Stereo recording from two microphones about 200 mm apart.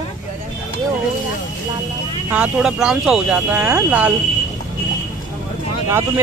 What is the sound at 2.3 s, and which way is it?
Speech, 5° right (ahead or behind).